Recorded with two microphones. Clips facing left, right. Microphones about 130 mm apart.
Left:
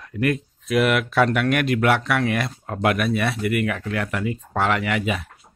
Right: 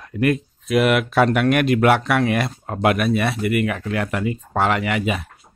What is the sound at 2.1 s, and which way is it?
Speech, 15° right (ahead or behind).